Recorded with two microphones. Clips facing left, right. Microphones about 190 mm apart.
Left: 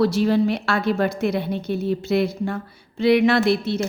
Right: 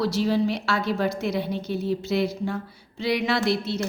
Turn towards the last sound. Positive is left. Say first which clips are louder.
# left 6 dB
turn(degrees=55)  # may be behind; listen again after turning